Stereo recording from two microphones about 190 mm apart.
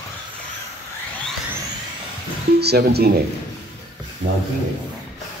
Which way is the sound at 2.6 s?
55° right (ahead or behind).